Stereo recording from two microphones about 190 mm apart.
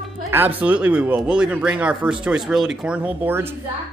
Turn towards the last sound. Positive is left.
turn(degrees=-10)  # may be behind; listen again after turning